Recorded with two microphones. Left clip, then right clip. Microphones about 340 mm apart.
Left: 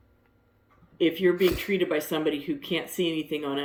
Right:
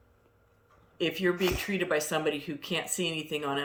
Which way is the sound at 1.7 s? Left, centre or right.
Right.